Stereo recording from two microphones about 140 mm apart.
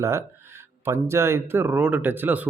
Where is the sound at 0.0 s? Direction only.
20° right (ahead or behind).